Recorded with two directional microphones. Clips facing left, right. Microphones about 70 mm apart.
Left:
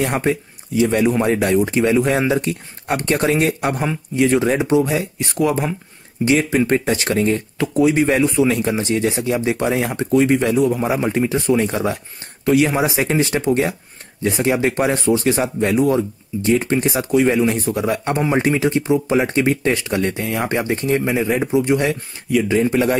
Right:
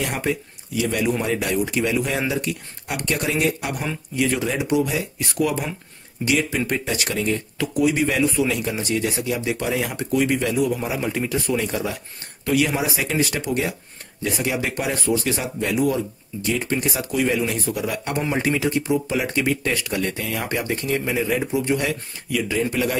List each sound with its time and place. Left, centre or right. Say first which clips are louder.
0.0 s a man's voice: left 5 dB; left
3.8 s a man's voice: left 4 dB; left
17.1 s speech: left 7 dB; left